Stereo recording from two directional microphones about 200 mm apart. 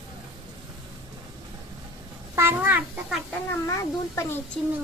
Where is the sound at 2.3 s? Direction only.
10° right (ahead or behind).